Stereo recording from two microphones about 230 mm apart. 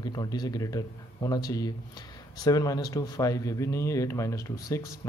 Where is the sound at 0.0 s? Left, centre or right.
Centre.